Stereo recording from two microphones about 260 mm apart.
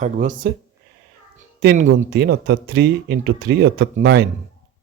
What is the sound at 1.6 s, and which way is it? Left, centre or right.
Speech, right.